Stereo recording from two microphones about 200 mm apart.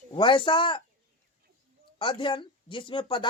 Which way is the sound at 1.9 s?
25° left (ahead or behind).